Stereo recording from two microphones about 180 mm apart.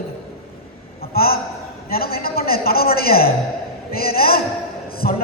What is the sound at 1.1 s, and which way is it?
A woman's voice, 55° left (ahead or behind).